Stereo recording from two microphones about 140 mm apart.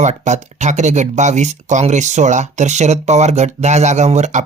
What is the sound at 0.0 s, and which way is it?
Speech, 55° right (ahead or behind).